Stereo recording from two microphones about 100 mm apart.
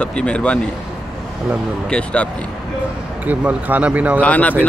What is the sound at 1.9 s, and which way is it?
Speech, 10° left (ahead or behind).